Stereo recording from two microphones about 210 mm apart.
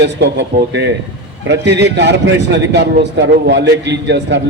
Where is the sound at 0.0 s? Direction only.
55° right (ahead or behind).